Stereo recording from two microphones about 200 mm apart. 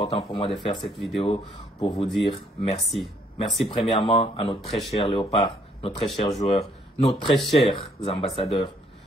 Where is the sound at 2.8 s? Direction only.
Centre (ahead or behind).